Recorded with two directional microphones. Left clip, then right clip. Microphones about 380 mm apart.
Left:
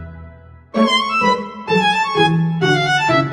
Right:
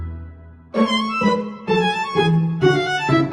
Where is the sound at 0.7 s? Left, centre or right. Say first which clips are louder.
Left 4 dB; centre.